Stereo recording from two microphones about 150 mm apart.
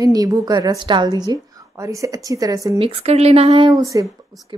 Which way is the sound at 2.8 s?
45° right (ahead or behind).